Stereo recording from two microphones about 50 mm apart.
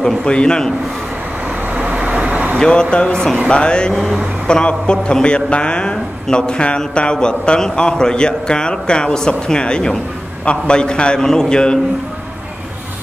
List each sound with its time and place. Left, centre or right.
0.0 s a man's voice: centre
1.7 s vehicle: right
2.6 s a man's voice: centre
3.9 s speech: centre
4.5 s a man's voice: centre